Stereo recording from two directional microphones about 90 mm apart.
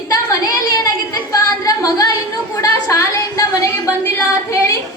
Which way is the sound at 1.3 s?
45° left (ahead or behind).